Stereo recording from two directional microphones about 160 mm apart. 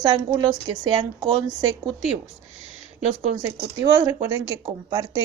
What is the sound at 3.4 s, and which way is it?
A woman's voice, 20° right (ahead or behind).